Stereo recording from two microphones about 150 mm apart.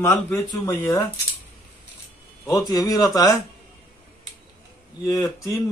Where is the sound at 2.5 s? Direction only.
25° left (ahead or behind).